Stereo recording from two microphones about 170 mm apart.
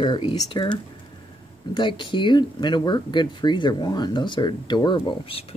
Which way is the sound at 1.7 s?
30° left (ahead or behind).